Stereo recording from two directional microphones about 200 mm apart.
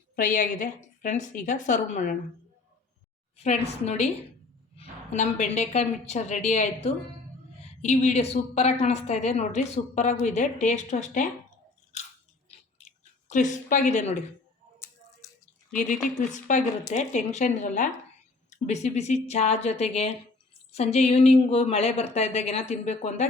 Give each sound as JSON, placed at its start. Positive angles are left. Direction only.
{"t": 0.2, "sound": "speech", "side_deg": 40}
{"t": 3.3, "sound": "speech", "side_deg": 30}
{"t": 12.5, "sound": "a sound", "side_deg": 35}
{"t": 13.9, "sound": "speech", "side_deg": 35}
{"t": 15.7, "sound": "speech", "side_deg": 40}